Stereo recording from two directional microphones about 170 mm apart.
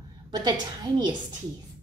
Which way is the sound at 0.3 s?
25° right (ahead or behind).